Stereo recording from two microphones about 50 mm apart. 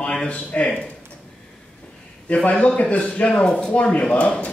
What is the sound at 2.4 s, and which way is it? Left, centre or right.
Speech, left.